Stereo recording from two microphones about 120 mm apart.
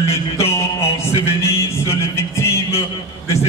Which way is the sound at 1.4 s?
20° left (ahead or behind).